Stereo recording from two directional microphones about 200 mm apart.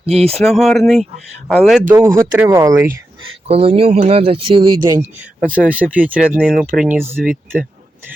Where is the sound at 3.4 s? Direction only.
30° right (ahead or behind); by 7.6 s 5° right (ahead or behind).